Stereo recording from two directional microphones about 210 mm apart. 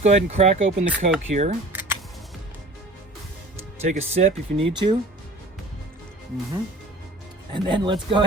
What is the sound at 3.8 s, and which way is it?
Speech, 30° right (ahead or behind).